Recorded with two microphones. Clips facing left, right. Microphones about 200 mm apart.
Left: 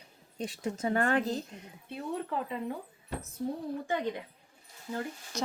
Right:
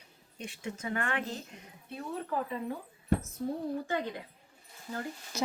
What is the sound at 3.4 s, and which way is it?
Speech, 20° left (ahead or behind).